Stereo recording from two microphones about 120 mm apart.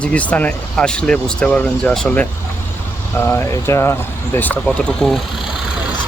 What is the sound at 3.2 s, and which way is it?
Speech, 20° left (ahead or behind).